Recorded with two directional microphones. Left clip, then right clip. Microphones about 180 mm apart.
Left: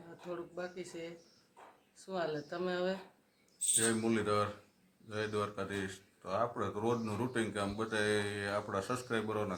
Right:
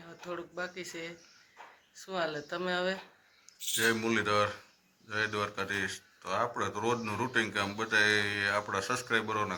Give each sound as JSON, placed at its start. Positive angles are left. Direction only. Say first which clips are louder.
{"t": 0.3, "sound": "speech", "louder": "right 4 dB", "side_deg": -15}
{"t": 3.8, "sound": "speech", "louder": "right 5 dB", "side_deg": 15}